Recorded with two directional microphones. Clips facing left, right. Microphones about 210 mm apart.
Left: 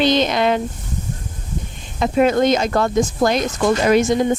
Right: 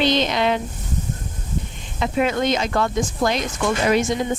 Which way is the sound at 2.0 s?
40° left (ahead or behind).